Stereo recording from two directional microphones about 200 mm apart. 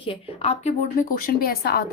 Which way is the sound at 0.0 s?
30° left (ahead or behind).